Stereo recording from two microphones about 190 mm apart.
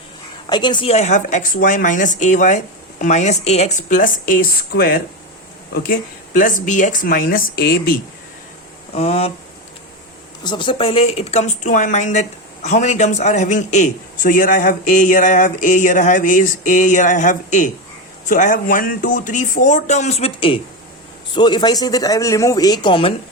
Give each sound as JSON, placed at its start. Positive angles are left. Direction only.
{"t": 0.4, "sound": "a man's voice", "side_deg": 25}
{"t": 9.0, "sound": "a man's voice", "side_deg": 30}
{"t": 10.4, "sound": "a man's voice", "side_deg": 25}